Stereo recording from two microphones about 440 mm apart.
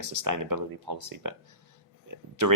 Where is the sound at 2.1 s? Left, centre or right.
Right.